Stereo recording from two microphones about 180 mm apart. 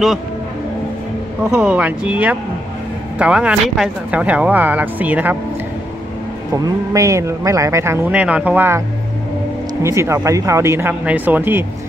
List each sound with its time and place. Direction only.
1.5 s a man's voice: 5° right (ahead or behind)
6.5 s a man's voice: 15° right (ahead or behind)
9.8 s a man's voice: 15° right (ahead or behind)